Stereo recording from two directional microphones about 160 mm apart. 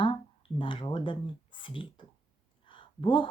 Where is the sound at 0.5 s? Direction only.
30° left (ahead or behind).